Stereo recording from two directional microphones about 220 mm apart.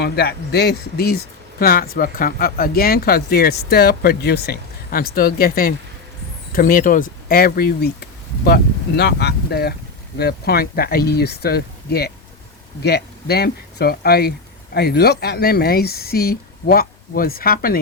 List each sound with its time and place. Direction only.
0.0 s speech: 45° left (ahead or behind)